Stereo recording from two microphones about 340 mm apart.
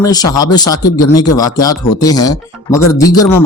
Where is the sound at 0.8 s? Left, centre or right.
Left.